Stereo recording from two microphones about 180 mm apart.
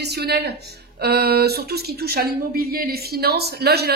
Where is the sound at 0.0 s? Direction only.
65° right (ahead or behind).